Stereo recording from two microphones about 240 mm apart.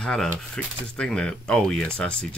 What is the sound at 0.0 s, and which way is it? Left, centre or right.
Speech, centre.